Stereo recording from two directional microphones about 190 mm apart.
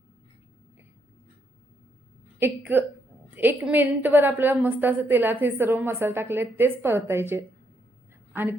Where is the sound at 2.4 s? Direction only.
10° right (ahead or behind).